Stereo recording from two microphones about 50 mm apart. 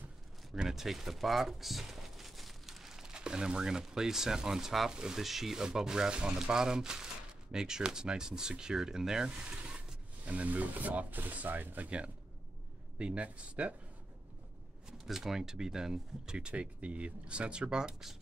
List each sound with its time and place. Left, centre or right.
0.6 s speech: centre; by 13.7 s right
14.9 s speech: centre